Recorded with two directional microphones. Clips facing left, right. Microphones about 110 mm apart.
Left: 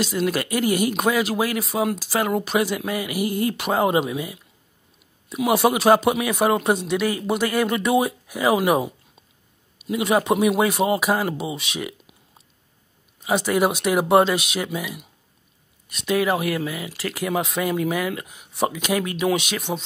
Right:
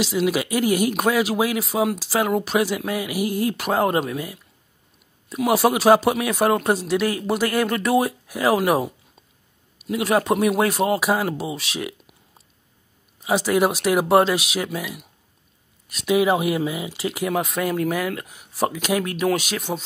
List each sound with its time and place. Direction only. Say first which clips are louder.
0.0 s speech: right 2 dB; 10° right (ahead or behind)
13.2 s speech: right 1 dB; centre (ahead or behind)
16.2 s speech: right 3 dB; 20° right (ahead or behind)
17.3 s speech: left 1 dB; centre (ahead or behind)